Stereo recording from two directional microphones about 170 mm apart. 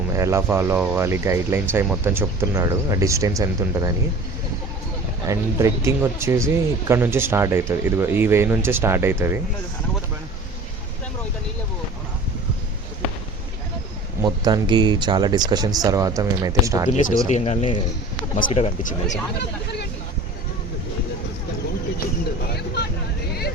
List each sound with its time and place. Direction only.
0.2 s speech: 15° right (ahead or behind)
5.3 s speech: 15° right (ahead or behind)
14.2 s speech: 25° right (ahead or behind)
17.2 s speech: 40° left (ahead or behind)
18.8 s speech: 45° left (ahead or behind)
22.5 s vehicle: 75° left (ahead or behind)